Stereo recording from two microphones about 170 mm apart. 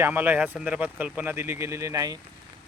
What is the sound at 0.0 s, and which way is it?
Speech, 10° right (ahead or behind).